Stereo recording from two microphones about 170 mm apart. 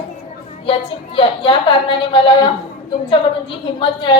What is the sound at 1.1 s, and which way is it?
A woman's voice, 30° left (ahead or behind).